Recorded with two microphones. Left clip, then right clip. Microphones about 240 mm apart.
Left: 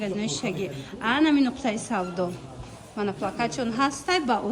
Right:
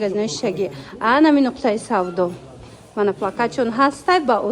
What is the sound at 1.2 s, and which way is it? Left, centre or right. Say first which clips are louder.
Speech: right 7 dB; centre.